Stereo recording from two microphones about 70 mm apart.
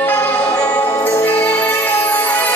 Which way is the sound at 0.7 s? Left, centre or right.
Left.